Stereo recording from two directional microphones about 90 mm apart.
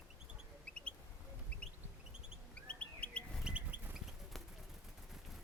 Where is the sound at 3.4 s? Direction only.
15° right (ahead or behind).